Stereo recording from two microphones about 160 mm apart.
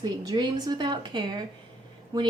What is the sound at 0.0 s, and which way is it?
Speech, 25° right (ahead or behind).